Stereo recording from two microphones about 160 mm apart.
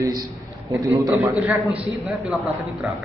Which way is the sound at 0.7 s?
20° right (ahead or behind).